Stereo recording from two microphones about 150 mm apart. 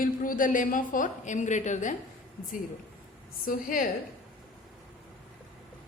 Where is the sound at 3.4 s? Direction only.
70° left (ahead or behind).